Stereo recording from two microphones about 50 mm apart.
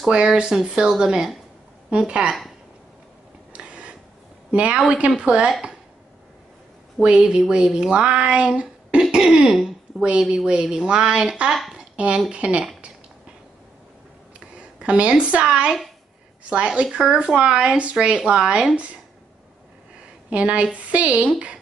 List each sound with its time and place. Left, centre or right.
0.1 s speech: centre
3.5 s a sound: right
4.5 s a woman's voice: right
7.0 s speech: centre
9.1 s throat clearing: centre
10.3 s speech: centre
11.7 s a sound: right
12.3 s speech: right
14.8 s speech: right
20.2 s a woman's voice: right